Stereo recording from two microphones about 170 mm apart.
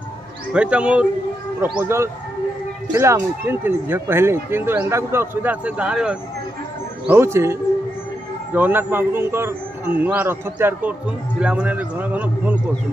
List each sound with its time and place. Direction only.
0.5 s a man's voice: 5° right (ahead or behind)
8.5 s a man's voice: 10° right (ahead or behind)